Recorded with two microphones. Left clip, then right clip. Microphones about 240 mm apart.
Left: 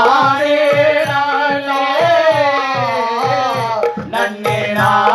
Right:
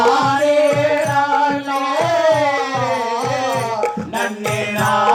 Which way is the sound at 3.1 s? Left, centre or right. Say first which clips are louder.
Left 4 dB; left.